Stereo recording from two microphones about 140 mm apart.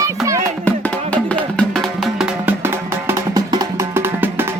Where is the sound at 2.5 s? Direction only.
15° right (ahead or behind).